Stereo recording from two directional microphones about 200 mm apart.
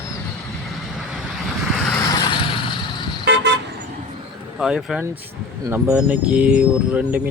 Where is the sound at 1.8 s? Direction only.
15° left (ahead or behind).